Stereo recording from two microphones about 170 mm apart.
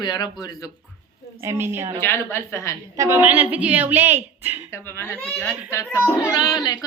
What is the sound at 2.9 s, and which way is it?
A woman's voice, 15° right (ahead or behind).